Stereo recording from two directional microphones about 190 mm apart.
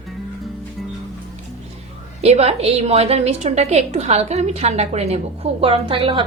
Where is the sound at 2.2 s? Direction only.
35° right (ahead or behind).